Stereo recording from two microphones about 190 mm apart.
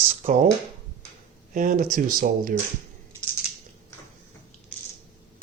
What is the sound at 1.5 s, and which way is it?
Speech, 45° right (ahead or behind).